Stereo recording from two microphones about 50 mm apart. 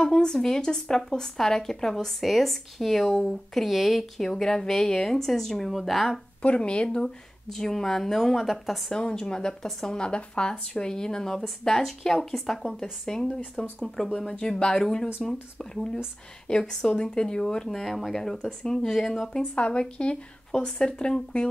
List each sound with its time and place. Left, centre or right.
0.0 s a woman's voice: centre
6.4 s speech: left
7.5 s a woman's voice: centre
9.3 s a woman's voice: centre
19.5 s speech: left